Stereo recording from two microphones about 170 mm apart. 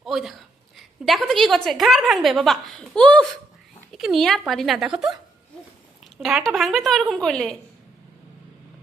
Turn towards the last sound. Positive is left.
turn(degrees=5)  # may be behind; listen again after turning